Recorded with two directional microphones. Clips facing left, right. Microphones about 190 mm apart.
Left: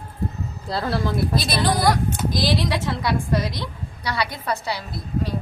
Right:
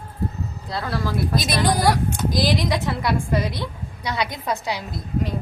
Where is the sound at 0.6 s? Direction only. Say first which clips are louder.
Left 3 dB; 30° left (ahead or behind).